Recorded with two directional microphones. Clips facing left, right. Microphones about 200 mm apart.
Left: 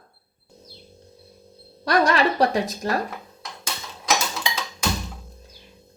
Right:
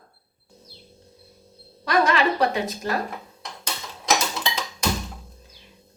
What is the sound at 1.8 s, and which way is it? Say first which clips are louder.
A woman's voice: left 1 dB; 40° left (ahead or behind).